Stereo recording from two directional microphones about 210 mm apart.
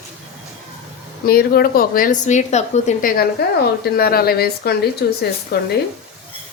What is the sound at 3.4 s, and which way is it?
A woman's voice, 50° left (ahead or behind).